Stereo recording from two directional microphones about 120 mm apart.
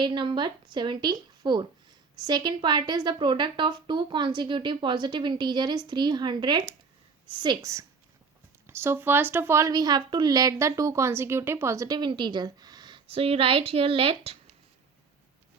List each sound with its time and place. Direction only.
0.0 s a woman's voice: 40° right (ahead or behind)
8.6 s speech: 20° right (ahead or behind)
11.9 s a woman's voice: 40° right (ahead or behind)
13.1 s a woman's voice: 55° right (ahead or behind)